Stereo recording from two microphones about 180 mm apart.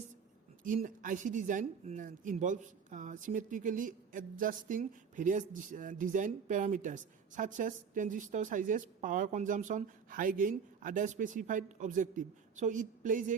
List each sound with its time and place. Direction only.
0.6 s speech: 45° right (ahead or behind)